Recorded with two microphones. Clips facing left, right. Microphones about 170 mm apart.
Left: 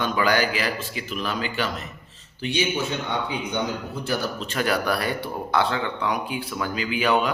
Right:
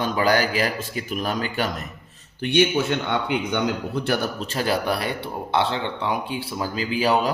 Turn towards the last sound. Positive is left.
turn(degrees=-35)  # may be behind; listen again after turning